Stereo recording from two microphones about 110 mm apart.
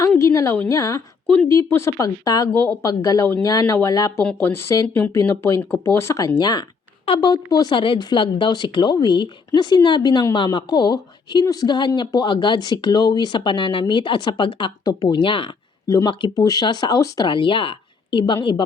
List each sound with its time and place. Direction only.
0.2 s speech: 25° left (ahead or behind)
2.5 s speech: 15° left (ahead or behind)
2.8 s speech: 30° left (ahead or behind)
7.0 s a sound: 55° left (ahead or behind)
7.3 s speech: 40° left (ahead or behind)
16.0 s speech: 40° left (ahead or behind)